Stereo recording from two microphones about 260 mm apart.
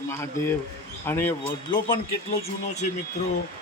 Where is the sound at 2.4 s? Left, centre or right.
Left.